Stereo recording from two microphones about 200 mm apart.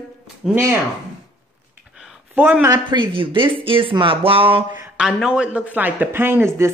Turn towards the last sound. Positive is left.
turn(degrees=-10)  # may be behind; listen again after turning